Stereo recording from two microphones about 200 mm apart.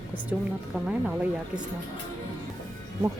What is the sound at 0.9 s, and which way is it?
Speech, 5° right (ahead or behind).